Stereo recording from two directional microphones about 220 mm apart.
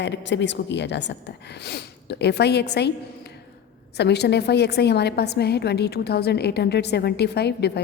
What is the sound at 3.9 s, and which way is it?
A woman's voice, 50° left (ahead or behind).